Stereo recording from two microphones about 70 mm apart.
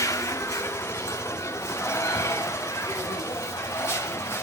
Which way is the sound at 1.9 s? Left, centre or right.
Left.